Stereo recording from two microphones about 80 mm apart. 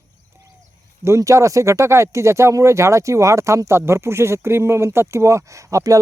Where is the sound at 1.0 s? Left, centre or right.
Right.